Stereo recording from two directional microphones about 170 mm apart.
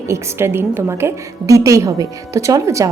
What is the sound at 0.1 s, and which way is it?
A woman's voice, 15° right (ahead or behind).